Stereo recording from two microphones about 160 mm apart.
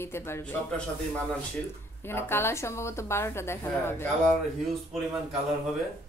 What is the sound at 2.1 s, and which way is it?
A woman's voice, 15° left (ahead or behind).